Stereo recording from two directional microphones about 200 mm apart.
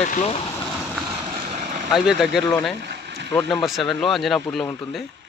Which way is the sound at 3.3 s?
5° left (ahead or behind).